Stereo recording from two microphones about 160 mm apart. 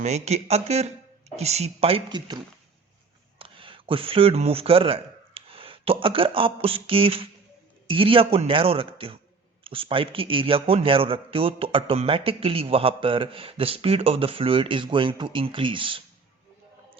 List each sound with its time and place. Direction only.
0.0 s a man's voice: 45° right (ahead or behind)